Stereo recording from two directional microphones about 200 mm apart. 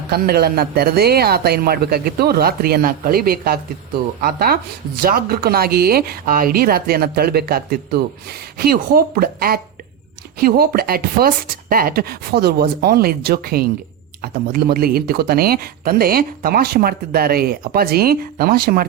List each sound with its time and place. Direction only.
0.1 s speech: 50° right (ahead or behind)